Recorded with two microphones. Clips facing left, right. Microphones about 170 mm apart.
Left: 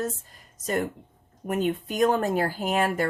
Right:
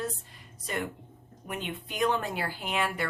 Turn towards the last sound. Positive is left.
turn(degrees=45)  # may be behind; listen again after turning